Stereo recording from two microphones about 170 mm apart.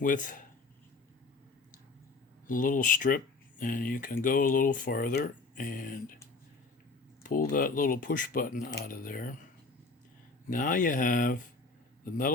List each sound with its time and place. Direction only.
0.0 s speech: 50° left (ahead or behind)
2.5 s speech: 50° left (ahead or behind)
7.2 s speech: 55° left (ahead or behind)
10.5 s speech: 50° left (ahead or behind)